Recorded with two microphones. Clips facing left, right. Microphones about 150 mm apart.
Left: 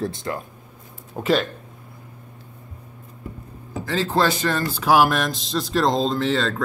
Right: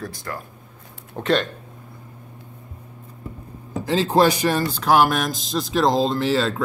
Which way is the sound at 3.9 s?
20° right (ahead or behind).